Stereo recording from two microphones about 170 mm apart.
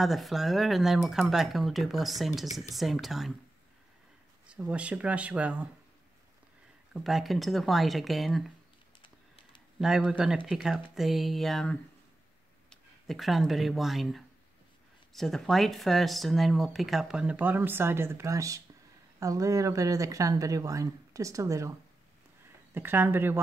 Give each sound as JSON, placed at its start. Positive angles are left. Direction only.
{"t": 0.0, "sound": "speech", "side_deg": 0}
{"t": 4.5, "sound": "speech", "side_deg": -5}
{"t": 6.9, "sound": "speech", "side_deg": 0}
{"t": 9.8, "sound": "speech", "side_deg": -5}
{"t": 22.8, "sound": "speech", "side_deg": -10}